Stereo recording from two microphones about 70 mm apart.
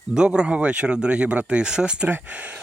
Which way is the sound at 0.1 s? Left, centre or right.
Centre.